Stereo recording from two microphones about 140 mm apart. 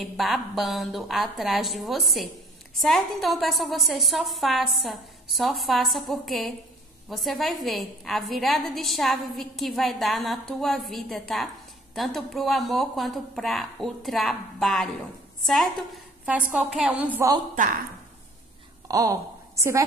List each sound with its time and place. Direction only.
0.0 s a woman's voice: centre (ahead or behind)
16.3 s a woman's voice: 10° right (ahead or behind)
18.9 s a woman's voice: 25° right (ahead or behind)